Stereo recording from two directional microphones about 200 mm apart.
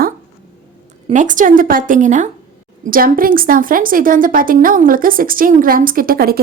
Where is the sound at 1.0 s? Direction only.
40° right (ahead or behind).